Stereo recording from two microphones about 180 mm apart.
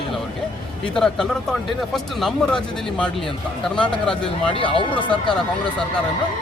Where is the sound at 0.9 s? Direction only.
5° left (ahead or behind).